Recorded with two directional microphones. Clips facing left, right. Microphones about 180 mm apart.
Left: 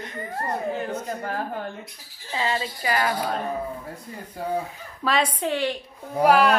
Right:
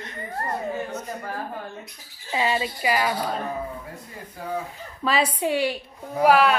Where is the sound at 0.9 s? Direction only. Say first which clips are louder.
Left 3 dB; 65° left (ahead or behind).